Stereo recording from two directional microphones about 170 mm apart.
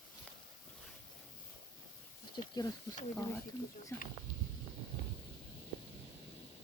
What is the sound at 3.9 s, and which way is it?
Speech, 10° left (ahead or behind).